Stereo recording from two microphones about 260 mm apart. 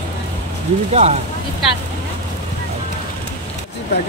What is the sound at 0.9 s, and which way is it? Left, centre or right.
Speech, right.